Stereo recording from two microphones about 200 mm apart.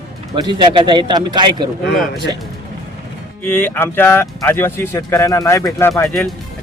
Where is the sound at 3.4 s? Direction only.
10° left (ahead or behind).